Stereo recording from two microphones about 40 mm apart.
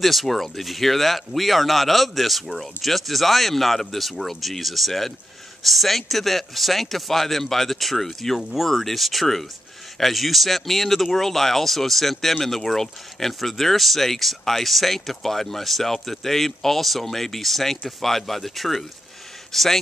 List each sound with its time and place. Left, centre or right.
0.0 s a man's voice: centre